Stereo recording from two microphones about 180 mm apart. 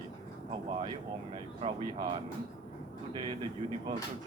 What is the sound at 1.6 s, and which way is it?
Speech, 30° right (ahead or behind).